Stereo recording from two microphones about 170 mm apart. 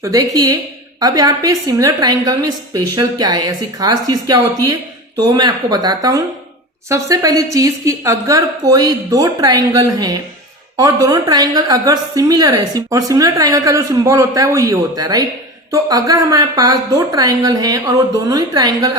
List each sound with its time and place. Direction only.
0.0 s a woman's voice: 20° right (ahead or behind)